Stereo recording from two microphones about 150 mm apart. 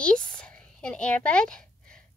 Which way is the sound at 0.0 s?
5° left (ahead or behind).